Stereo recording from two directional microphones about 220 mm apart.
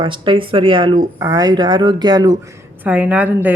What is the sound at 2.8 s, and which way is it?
Speech, 5° right (ahead or behind).